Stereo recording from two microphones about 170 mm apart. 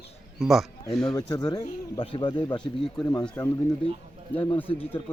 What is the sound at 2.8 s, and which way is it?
Speech, 5° left (ahead or behind).